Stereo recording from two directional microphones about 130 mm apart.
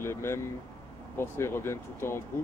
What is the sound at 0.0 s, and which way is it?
Speech, 20° left (ahead or behind).